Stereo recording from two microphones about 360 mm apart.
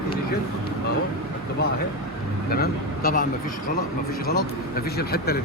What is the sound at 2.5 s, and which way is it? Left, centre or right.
Speech, left.